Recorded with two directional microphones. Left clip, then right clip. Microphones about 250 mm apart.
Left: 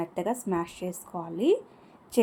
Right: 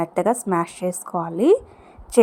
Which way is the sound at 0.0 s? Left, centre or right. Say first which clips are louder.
Right 10 dB; right.